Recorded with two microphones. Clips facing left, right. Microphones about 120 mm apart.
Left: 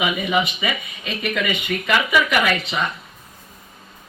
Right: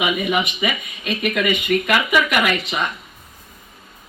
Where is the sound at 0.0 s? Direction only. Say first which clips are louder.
Even; 15° right (ahead or behind).